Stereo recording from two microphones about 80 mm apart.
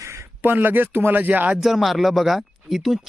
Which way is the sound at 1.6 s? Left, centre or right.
Centre.